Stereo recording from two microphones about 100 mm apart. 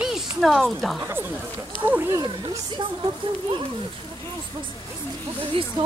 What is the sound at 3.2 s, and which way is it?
Speech, 60° right (ahead or behind).